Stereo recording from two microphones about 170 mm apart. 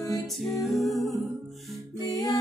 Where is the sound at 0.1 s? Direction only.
Centre (ahead or behind).